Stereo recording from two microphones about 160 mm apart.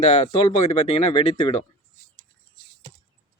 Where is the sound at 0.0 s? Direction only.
45° left (ahead or behind).